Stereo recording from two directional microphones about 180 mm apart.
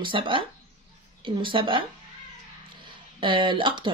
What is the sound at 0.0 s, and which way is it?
Speech, 30° right (ahead or behind).